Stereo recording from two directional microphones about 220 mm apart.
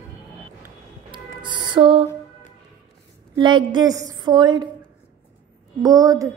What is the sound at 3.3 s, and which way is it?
A woman's voice, 20° right (ahead or behind).